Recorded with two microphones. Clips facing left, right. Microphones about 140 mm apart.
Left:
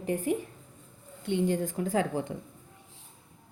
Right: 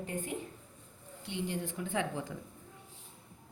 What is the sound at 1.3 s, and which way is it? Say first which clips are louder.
A woman's voice: left 9 dB; 45° left (ahead or behind).